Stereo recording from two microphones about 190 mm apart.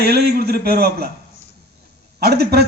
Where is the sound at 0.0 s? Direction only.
55° right (ahead or behind).